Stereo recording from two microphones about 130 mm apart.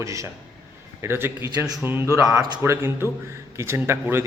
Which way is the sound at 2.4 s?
35° right (ahead or behind).